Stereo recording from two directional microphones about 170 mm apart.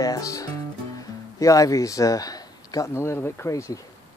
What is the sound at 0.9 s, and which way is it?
Speech, 20° left (ahead or behind).